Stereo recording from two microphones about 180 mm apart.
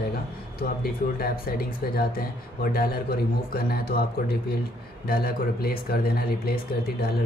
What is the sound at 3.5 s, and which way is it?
Speech, 55° left (ahead or behind).